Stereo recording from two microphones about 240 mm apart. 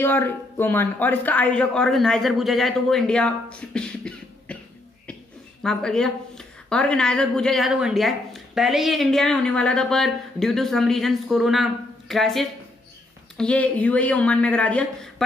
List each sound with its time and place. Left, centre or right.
0.0 s speech: centre
5.6 s speech: centre